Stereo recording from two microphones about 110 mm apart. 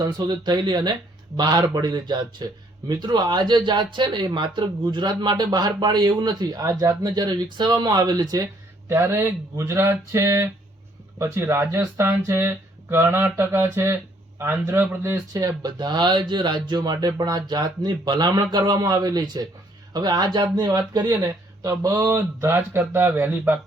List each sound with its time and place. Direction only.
0.0 s speech: 35° right (ahead or behind)
8.9 s speech: 20° right (ahead or behind)
15.3 s speech: 35° right (ahead or behind); by 23.6 s 15° right (ahead or behind)